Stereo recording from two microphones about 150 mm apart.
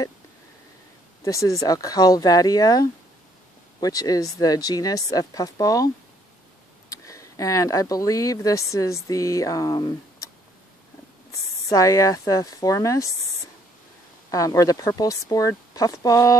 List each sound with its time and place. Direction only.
1.2 s speech: 20° left (ahead or behind)
6.9 s speech: 20° left (ahead or behind)
11.7 s speech: 20° left (ahead or behind)
14.3 s speech: 20° left (ahead or behind)